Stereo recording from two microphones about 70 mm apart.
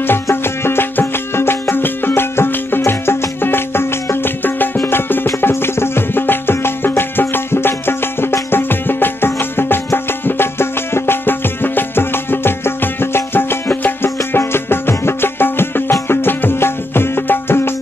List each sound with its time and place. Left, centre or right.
0.0 s music: left